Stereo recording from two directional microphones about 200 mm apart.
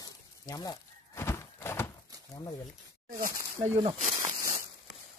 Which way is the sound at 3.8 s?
35° right (ahead or behind).